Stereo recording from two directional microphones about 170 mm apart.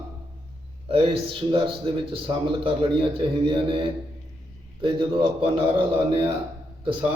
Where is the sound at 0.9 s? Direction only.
30° right (ahead or behind).